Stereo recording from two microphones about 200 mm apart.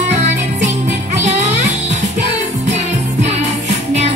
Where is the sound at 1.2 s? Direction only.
35° right (ahead or behind).